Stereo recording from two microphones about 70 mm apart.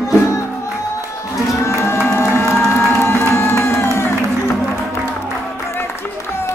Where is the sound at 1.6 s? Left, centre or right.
Left.